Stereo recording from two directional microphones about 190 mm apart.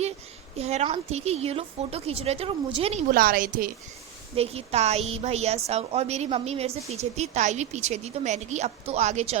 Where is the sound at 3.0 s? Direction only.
50° right (ahead or behind).